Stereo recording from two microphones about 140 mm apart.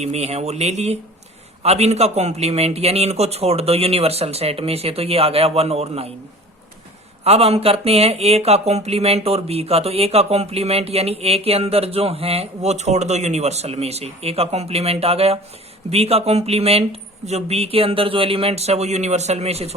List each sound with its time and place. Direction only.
0.0 s speech: 50° right (ahead or behind)
7.3 s speech: 45° right (ahead or behind)